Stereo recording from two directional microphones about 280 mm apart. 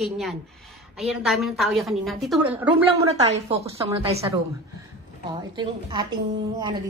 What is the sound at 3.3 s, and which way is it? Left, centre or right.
Speech, right.